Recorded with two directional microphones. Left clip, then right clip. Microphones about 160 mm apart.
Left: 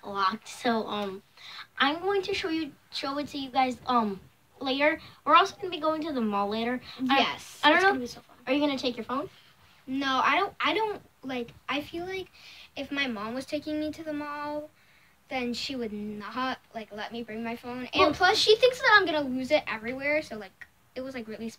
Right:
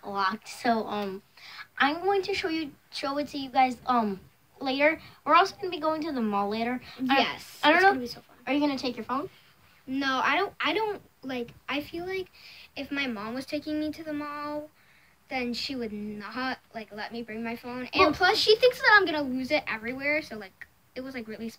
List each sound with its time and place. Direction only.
0.0 s a woman's voice: 20° right (ahead or behind)
7.2 s a woman's voice: centre (ahead or behind)
7.6 s a woman's voice: 20° right (ahead or behind)
9.8 s a woman's voice: 5° left (ahead or behind)